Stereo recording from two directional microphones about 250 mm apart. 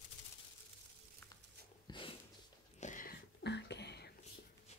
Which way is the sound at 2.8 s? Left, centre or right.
Left.